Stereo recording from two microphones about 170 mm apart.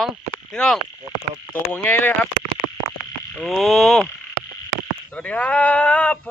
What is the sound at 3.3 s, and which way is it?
Speech, centre (ahead or behind).